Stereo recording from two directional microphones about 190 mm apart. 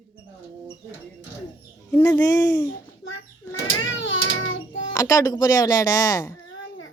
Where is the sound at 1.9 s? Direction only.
10° left (ahead or behind).